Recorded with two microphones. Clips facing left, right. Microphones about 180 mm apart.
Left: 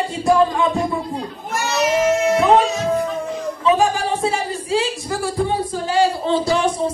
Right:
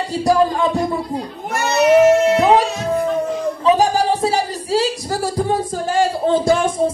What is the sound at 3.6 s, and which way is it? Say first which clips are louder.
Music: right 2 dB; 40° right (ahead or behind).